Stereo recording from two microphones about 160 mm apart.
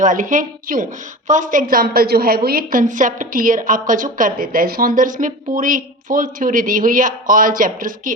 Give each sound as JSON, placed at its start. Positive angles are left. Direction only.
{"t": 0.0, "sound": "a woman's voice", "side_deg": -55}